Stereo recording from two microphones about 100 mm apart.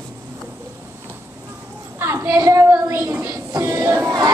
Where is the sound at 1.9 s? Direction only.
25° right (ahead or behind).